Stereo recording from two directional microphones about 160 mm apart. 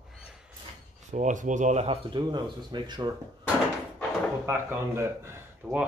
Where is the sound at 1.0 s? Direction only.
50° right (ahead or behind).